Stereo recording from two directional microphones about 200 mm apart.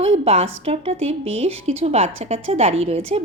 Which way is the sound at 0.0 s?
30° right (ahead or behind).